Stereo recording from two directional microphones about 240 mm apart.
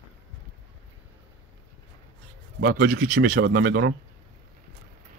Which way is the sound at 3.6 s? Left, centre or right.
Right.